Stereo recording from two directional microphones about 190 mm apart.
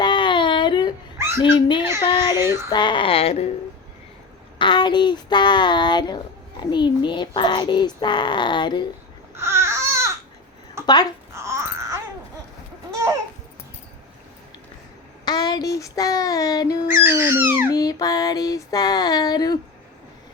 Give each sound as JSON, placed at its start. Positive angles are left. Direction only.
{"t": 0.0, "sound": "a sound", "side_deg": 25}
{"t": 1.4, "sound": "a child's voice", "side_deg": 25}
{"t": 2.3, "sound": "dog", "side_deg": -15}
{"t": 2.6, "sound": "a child's voice", "side_deg": 25}
{"t": 4.5, "sound": "a child's voice", "side_deg": 25}
{"t": 9.3, "sound": "baby cry", "side_deg": -15}
{"t": 10.8, "sound": "speech", "side_deg": 20}
{"t": 11.3, "sound": "wail", "side_deg": -15}
{"t": 15.2, "sound": "child singing", "side_deg": 20}
{"t": 17.0, "sound": "dog", "side_deg": -10}
{"t": 17.7, "sound": "a child's voice", "side_deg": 20}